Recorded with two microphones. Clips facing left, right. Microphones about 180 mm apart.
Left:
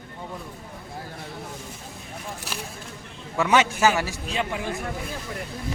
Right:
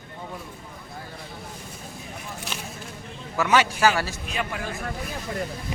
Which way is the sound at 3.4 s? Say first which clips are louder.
Left 1 dB; 20° left (ahead or behind).